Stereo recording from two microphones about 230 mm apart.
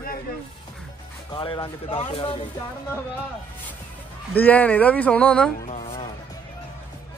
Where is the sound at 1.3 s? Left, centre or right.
Left.